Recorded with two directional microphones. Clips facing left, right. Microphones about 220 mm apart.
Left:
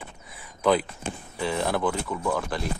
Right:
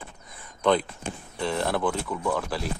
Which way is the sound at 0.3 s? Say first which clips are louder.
Even; 5° left (ahead or behind).